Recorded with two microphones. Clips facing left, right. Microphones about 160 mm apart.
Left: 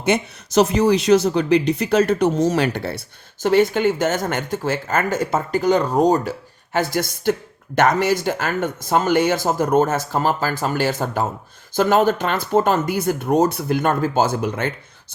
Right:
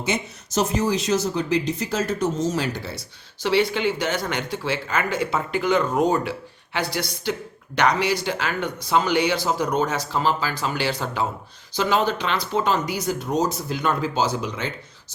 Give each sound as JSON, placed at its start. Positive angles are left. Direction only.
{"t": 0.0, "sound": "speech", "side_deg": 65}
{"t": 3.4, "sound": "speech", "side_deg": 50}